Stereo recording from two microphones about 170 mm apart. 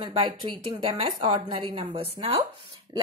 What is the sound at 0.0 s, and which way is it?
A woman's voice, 30° right (ahead or behind).